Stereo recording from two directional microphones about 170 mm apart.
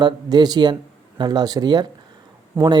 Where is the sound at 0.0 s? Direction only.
25° right (ahead or behind).